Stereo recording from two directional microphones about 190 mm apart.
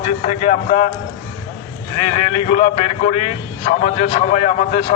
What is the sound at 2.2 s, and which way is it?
A man's voice, 30° left (ahead or behind).